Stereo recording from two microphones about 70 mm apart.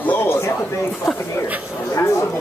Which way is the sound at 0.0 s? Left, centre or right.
Left.